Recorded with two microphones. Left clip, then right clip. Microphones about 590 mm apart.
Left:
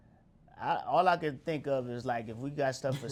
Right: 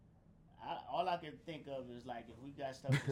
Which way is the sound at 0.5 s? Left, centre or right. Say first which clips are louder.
Left 12 dB; left.